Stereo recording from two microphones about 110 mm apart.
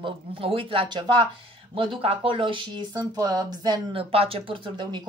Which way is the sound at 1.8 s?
55° right (ahead or behind).